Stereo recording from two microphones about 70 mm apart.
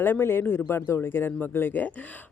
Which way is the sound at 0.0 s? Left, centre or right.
Left.